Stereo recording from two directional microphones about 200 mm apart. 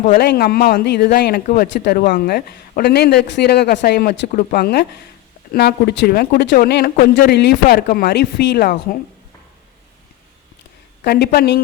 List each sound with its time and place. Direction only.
0.0 s a man's voice: 45° left (ahead or behind)
4.3 s a man's voice: 45° left (ahead or behind)
11.0 s a man's voice: 55° left (ahead or behind)